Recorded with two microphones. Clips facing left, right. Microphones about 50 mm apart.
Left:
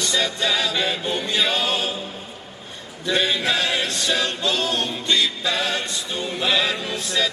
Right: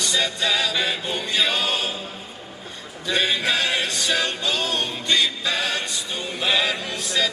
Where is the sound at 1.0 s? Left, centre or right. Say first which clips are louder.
Left 1 dB; left.